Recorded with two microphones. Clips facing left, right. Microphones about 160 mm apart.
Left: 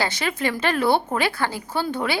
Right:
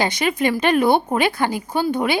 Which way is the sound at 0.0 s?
15° right (ahead or behind).